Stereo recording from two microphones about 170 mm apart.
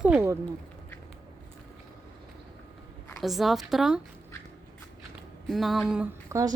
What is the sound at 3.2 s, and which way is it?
Speech, centre (ahead or behind).